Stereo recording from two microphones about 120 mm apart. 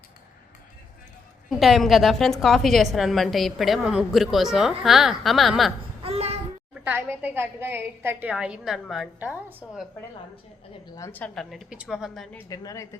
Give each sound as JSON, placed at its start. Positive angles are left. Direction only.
{"t": 1.5, "sound": "a woman's voice", "side_deg": 0}
{"t": 6.0, "sound": "babbling", "side_deg": -55}
{"t": 6.8, "sound": "a woman's voice", "side_deg": -15}
{"t": 9.2, "sound": "a woman's voice", "side_deg": -15}
{"t": 11.1, "sound": "a woman's voice", "side_deg": 10}
{"t": 11.5, "sound": "a woman's voice", "side_deg": -5}
{"t": 12.5, "sound": "a woman's voice", "side_deg": 25}